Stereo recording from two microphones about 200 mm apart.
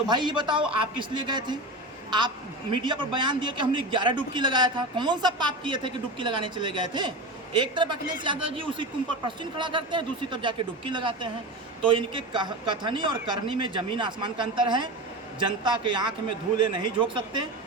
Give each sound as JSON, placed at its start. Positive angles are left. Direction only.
{"t": 0.1, "sound": "a man's voice", "side_deg": -20}